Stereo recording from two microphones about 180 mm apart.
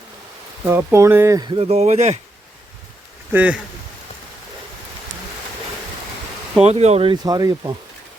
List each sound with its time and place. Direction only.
0.7 s speech: 15° right (ahead or behind); by 2.1 s 40° right (ahead or behind)
3.3 s speech: 10° right (ahead or behind)
6.6 s speech: 35° right (ahead or behind); by 7.8 s 20° right (ahead or behind)